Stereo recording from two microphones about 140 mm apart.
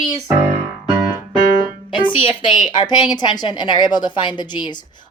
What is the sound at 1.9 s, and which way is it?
A woman's voice, 35° left (ahead or behind).